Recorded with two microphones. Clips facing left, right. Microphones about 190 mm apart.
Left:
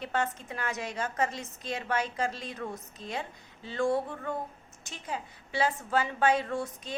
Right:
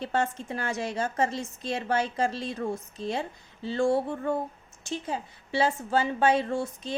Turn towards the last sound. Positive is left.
turn(degrees=-25)  # may be behind; listen again after turning